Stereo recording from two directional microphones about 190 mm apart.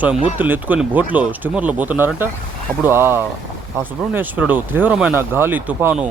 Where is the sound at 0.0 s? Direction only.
10° right (ahead or behind).